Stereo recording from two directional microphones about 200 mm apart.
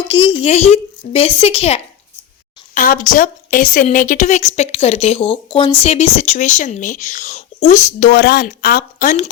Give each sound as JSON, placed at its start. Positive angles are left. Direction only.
{"t": 0.1, "sound": "speech", "side_deg": 25}
{"t": 2.7, "sound": "speech", "side_deg": 40}